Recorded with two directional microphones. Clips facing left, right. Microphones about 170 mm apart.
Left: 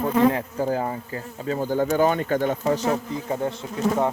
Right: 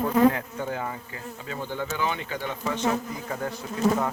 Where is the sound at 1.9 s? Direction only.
45° left (ahead or behind).